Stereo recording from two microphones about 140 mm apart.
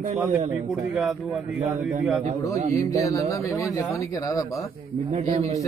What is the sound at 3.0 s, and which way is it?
Speech, 20° left (ahead or behind).